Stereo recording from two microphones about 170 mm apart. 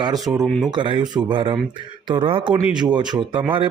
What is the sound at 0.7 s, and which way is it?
Speech, 25° right (ahead or behind).